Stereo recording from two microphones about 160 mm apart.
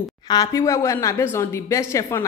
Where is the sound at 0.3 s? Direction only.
20° left (ahead or behind).